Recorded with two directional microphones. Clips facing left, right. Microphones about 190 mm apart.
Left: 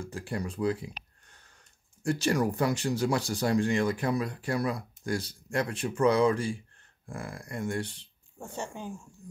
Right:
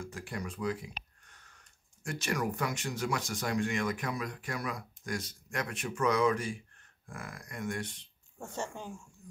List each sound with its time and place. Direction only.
0.0 s speech: 30° left (ahead or behind)
8.4 s speech: 10° left (ahead or behind)